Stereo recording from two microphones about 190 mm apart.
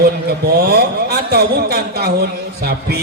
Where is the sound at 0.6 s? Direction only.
55° right (ahead or behind).